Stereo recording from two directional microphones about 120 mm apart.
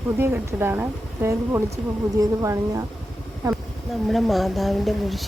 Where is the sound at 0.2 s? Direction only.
20° right (ahead or behind).